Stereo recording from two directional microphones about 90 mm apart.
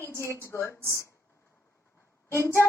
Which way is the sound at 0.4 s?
30° left (ahead or behind).